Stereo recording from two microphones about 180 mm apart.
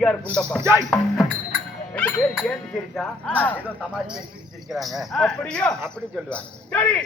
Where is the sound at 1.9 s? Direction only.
5° left (ahead or behind).